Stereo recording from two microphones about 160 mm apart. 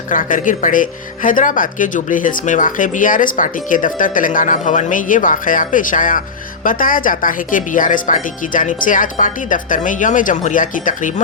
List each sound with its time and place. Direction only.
0.1 s speech: 55° left (ahead or behind)